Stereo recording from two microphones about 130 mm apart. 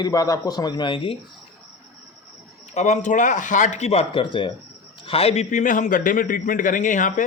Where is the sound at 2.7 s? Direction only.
65° left (ahead or behind).